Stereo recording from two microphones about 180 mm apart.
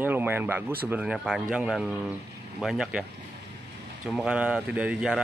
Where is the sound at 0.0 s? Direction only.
10° right (ahead or behind).